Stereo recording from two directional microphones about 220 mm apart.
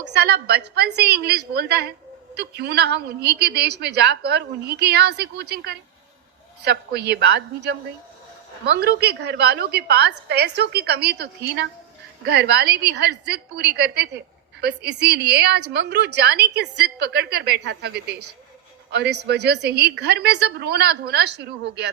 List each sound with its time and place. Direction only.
0.0 s a woman's voice: 50° right (ahead or behind)